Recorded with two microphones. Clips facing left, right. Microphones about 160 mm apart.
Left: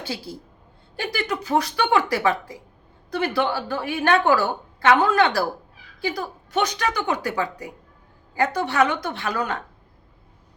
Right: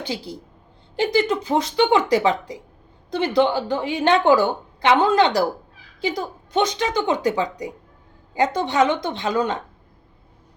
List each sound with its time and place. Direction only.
0.0 s a woman's voice: 20° right (ahead or behind)